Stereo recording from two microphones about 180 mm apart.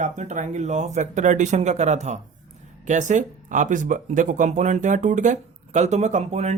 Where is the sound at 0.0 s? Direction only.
40° right (ahead or behind).